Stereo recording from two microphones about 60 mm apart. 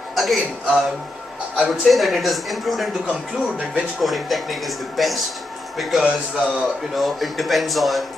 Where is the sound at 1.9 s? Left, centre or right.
Centre.